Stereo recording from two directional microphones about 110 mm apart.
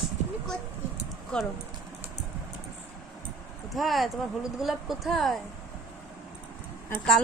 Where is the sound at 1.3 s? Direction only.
5° left (ahead or behind).